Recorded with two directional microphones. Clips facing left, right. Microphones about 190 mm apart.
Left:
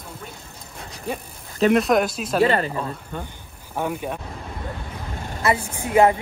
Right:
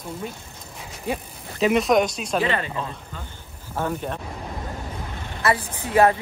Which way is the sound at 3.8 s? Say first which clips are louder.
Left 1 dB; 10° left (ahead or behind).